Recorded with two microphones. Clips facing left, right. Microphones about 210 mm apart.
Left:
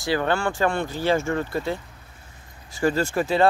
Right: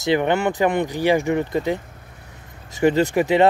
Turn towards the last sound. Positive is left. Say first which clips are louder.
# right 5 dB
turn(degrees=-20)  # may be behind; listen again after turning